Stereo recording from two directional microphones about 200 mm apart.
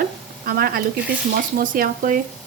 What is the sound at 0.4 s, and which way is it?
A woman's voice, 45° right (ahead or behind).